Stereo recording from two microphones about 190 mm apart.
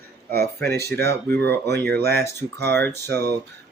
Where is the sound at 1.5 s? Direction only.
60° right (ahead or behind).